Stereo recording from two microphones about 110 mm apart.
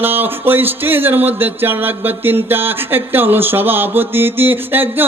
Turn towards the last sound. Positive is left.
turn(degrees=-20)  # may be behind; listen again after turning